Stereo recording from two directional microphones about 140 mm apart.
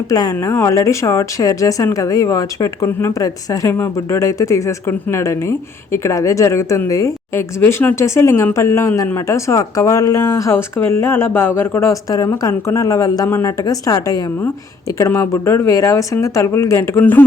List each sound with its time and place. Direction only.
0.1 s a woman's voice: 25° left (ahead or behind)